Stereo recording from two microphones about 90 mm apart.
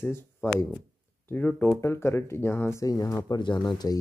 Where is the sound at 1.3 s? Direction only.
15° left (ahead or behind).